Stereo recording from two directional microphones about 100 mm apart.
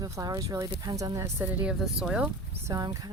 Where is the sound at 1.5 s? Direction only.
15° right (ahead or behind).